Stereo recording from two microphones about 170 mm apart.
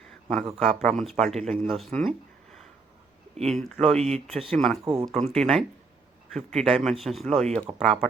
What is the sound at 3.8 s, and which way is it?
Speech, 40° right (ahead or behind).